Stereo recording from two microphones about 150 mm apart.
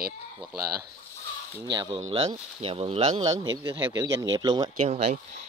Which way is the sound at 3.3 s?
25° right (ahead or behind).